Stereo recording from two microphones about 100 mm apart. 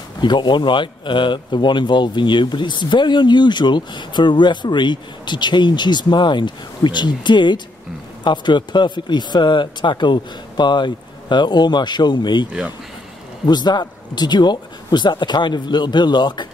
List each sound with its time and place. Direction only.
0.2 s speech: 50° left (ahead or behind)
13.5 s speech: 45° left (ahead or behind)